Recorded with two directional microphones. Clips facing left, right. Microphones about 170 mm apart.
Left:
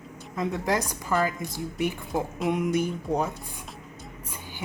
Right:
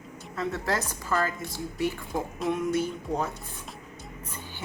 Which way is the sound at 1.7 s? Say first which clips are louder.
Left 1 dB; 20° left (ahead or behind).